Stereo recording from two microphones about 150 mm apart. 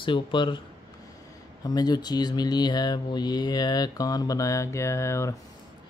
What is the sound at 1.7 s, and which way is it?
Speech, 25° left (ahead or behind).